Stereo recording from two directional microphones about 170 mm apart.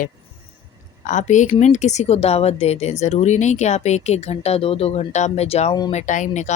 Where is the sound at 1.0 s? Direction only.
45° left (ahead or behind).